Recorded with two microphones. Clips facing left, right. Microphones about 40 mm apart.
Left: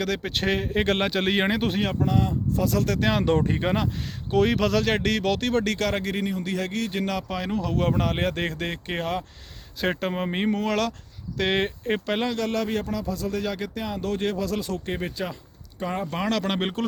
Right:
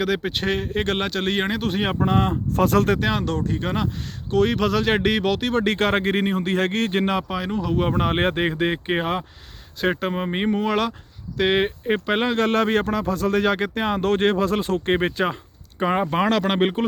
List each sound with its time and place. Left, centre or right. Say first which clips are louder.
0.0 s speech: right 3 dB; centre
2.0 s speech: right 4 dB; right
3.0 s speech: even; centre
3.3 s speech: left 2 dB; left
4.3 s speech: right 2 dB; centre
5.3 s speech: right 2 dB; centre
5.6 s speech: right 5 dB; right
7.3 s speech: right 3 dB; centre; by 8.4 s right
8.4 s speech: right 7 dB; right
9.8 s speech: right 3 dB; centre
12.2 s speech: right 6 dB; right
16.0 s speech: right 6 dB; right